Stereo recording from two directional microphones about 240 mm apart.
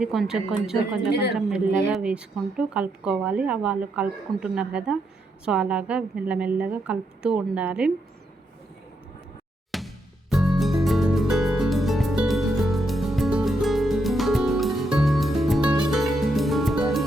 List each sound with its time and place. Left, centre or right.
0.0 s speech: centre
9.7 s music: centre